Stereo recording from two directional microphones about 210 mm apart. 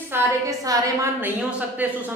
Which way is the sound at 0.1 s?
15° right (ahead or behind).